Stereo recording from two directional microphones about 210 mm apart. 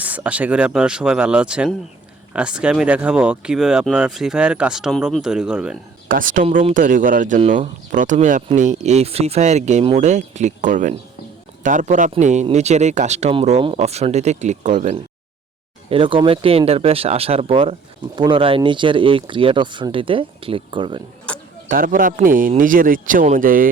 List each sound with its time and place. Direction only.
0.0 s speech: 5° right (ahead or behind)
6.1 s speech: 40° right (ahead or behind)
15.9 s speech: 25° right (ahead or behind)
21.7 s speech: 40° right (ahead or behind)